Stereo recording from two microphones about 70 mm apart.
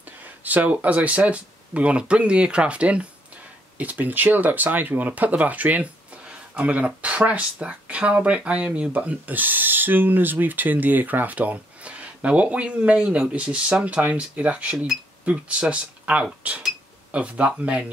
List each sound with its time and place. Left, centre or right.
0.4 s speech: right